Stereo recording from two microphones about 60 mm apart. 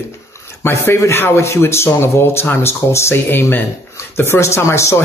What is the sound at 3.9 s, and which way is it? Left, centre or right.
Speech, left.